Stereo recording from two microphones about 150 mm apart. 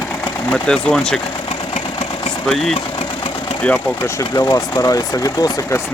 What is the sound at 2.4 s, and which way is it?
Speech, centre (ahead or behind).